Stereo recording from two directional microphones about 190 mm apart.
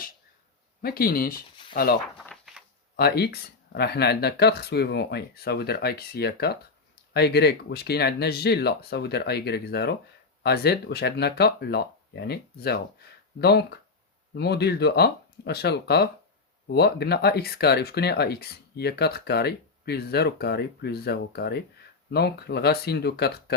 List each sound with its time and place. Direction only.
0.8 s speech: 50° left (ahead or behind)
2.2 s a sound: centre (ahead or behind)
2.9 s speech: 60° left (ahead or behind)